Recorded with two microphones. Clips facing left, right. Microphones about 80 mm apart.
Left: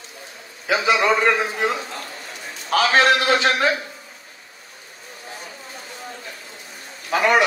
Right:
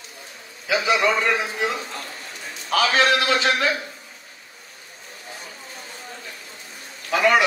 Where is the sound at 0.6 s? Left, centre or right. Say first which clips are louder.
Left 2 dB; left.